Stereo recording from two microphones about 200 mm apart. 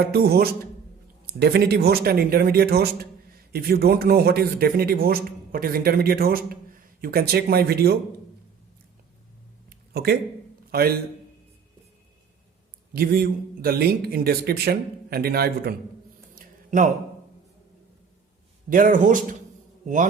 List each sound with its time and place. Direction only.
0.0 s speech: 50° right (ahead or behind)
9.6 s a sound: 50° right (ahead or behind)
10.7 s a man's voice: 50° right (ahead or behind)
12.9 s speech: 45° right (ahead or behind)
16.3 s a sound: 40° right (ahead or behind)
18.7 s speech: 40° right (ahead or behind)